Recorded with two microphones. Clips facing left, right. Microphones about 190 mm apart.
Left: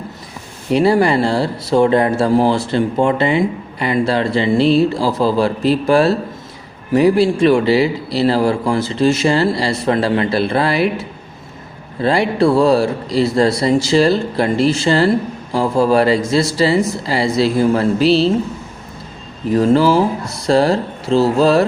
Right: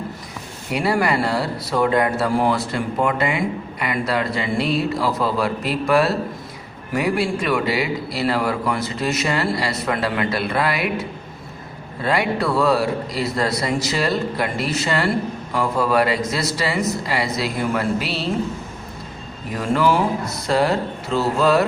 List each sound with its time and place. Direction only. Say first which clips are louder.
0.7 s speech: left 7 dB; 25° left (ahead or behind)
12.0 s speech: left 7 dB; 30° left (ahead or behind)
19.5 s speech: left 7 dB; 30° left (ahead or behind)